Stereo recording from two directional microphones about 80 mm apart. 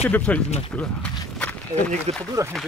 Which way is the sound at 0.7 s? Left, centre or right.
Centre.